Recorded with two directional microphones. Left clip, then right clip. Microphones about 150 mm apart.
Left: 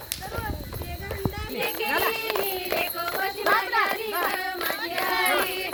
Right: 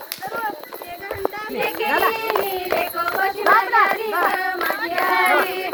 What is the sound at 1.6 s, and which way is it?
Music, 55° left (ahead or behind).